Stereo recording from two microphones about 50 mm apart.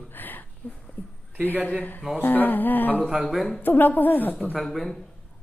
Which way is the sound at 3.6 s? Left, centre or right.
Left.